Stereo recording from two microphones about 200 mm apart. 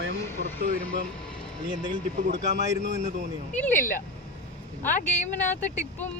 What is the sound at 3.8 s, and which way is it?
Speech, 40° left (ahead or behind).